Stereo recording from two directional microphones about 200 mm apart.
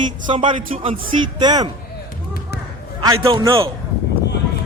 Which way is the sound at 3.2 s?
25° right (ahead or behind).